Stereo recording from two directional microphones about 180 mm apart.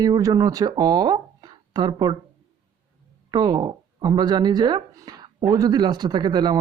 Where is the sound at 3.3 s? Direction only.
20° right (ahead or behind).